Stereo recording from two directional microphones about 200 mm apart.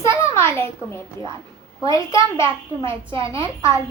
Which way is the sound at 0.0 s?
15° left (ahead or behind).